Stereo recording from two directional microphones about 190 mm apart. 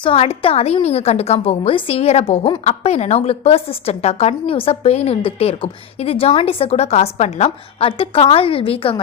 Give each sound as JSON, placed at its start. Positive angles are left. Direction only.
{"t": 0.0, "sound": "a woman's voice", "side_deg": 30}